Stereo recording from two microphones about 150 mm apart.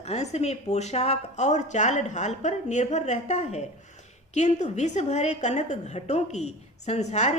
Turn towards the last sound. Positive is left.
turn(degrees=50)  # may be behind; listen again after turning